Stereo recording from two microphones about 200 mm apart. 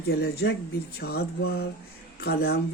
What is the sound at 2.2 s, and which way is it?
Speech, 55° left (ahead or behind).